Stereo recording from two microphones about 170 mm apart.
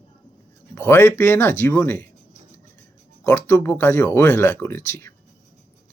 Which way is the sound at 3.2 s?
15° left (ahead or behind).